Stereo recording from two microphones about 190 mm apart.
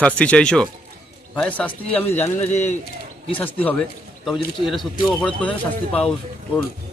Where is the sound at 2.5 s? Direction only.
35° left (ahead or behind).